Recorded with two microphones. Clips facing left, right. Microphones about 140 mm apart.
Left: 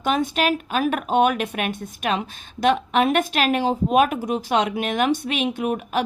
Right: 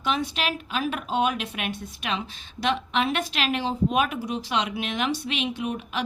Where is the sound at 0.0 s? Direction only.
45° left (ahead or behind).